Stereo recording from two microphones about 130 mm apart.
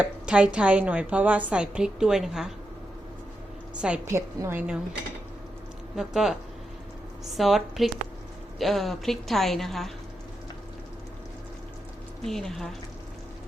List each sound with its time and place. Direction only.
0.0 s speech: 10° right (ahead or behind)
3.8 s speech: 10° right (ahead or behind)
4.1 s a woman's voice: 20° right (ahead or behind)
6.0 s a woman's voice: centre (ahead or behind)
7.3 s a woman's voice: centre (ahead or behind)
12.2 s a woman's voice: centre (ahead or behind)